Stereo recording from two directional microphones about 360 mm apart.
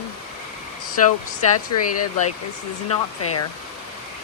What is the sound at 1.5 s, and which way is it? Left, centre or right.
Speech, left.